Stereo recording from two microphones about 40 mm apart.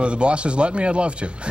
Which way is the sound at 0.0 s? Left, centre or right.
Right.